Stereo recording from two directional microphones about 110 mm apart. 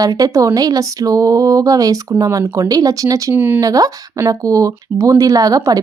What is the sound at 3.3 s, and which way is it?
Speech, 20° right (ahead or behind).